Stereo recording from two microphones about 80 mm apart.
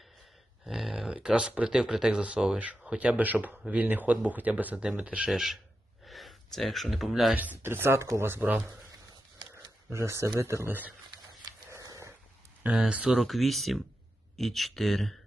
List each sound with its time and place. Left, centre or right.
0.6 s speech: centre
5.3 s speech: centre
7.6 s speech: right
8.4 s speech: centre
9.9 s speech: right
11.8 s dog: right
12.7 s speech: centre
13.1 s speech: centre